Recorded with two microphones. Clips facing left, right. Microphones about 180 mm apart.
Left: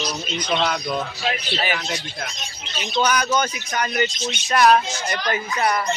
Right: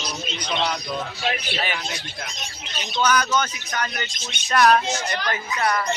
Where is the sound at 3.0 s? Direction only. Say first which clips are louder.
Left 1 dB; 15° left (ahead or behind).